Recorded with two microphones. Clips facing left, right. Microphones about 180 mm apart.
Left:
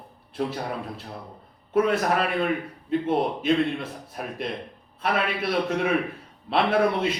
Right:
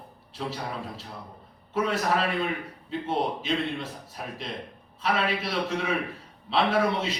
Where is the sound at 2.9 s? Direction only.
55° left (ahead or behind).